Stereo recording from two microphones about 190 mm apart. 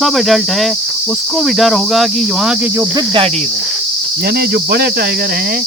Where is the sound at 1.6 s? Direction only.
Centre (ahead or behind).